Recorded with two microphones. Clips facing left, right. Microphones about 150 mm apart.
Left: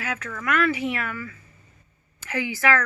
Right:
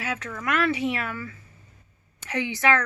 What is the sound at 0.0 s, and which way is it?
Speech, 20° right (ahead or behind).